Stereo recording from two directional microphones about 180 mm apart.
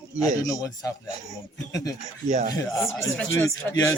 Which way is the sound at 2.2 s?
40° right (ahead or behind).